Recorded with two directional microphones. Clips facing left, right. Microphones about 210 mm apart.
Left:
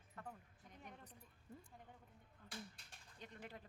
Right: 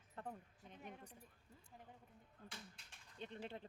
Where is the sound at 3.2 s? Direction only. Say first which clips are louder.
Right 5 dB; 25° right (ahead or behind).